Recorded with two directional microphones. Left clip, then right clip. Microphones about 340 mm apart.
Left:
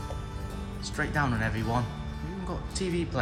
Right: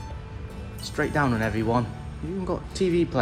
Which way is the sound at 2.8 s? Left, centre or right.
Left.